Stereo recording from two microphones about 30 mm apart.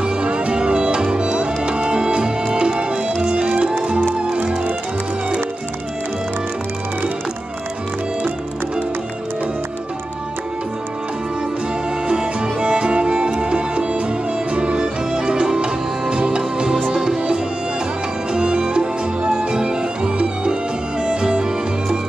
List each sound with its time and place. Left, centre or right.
0.0 s music: right
12.1 s music: right